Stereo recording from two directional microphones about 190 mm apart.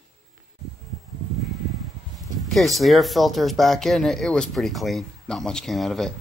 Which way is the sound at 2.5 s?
Centre (ahead or behind).